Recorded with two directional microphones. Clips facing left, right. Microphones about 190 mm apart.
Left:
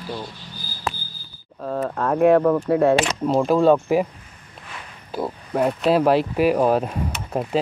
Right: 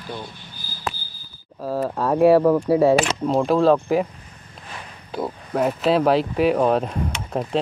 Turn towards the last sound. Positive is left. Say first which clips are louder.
# even
turn(degrees=5)  # may be behind; listen again after turning